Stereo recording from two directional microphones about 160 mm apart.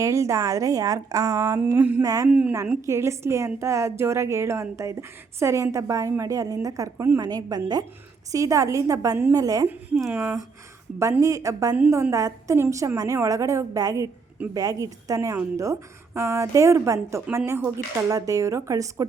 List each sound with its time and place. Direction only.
0.0 s a woman's voice: 20° right (ahead or behind)
10.1 s a woman's voice: 10° right (ahead or behind)